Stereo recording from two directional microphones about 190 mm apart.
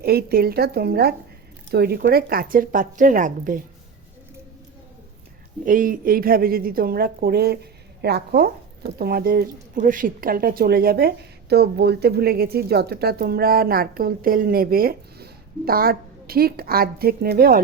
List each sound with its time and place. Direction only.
0.0 s a woman's voice: 55° right (ahead or behind)
5.6 s speech: 45° right (ahead or behind)